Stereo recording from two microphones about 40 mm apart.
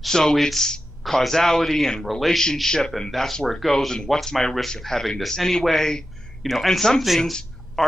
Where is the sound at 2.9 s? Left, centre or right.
Centre.